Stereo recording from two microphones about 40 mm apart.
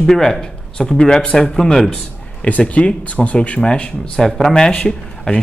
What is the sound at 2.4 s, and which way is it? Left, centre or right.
Speech, left.